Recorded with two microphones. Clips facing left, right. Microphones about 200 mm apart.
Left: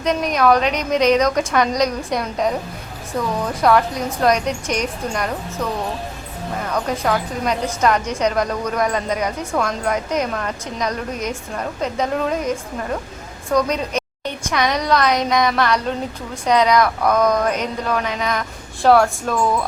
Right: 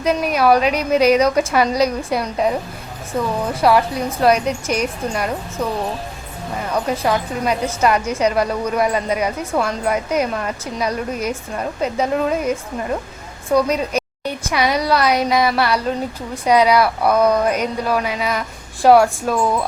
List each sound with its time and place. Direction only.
0.0 s a woman's voice: 5° right (ahead or behind)
3.6 s speech: 5° right (ahead or behind)
6.7 s a woman's voice: 10° right (ahead or behind)